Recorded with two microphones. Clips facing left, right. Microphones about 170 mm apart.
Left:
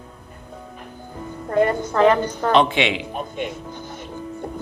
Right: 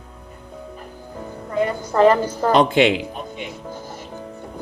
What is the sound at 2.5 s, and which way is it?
Music, 40° right (ahead or behind).